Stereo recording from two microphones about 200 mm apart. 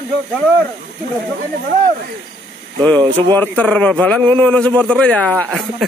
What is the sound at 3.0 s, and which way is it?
Speech, 25° right (ahead or behind).